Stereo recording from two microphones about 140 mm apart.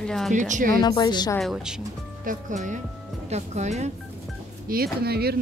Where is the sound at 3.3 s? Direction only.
55° right (ahead or behind).